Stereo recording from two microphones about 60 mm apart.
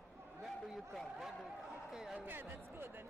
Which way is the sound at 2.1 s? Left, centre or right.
Right.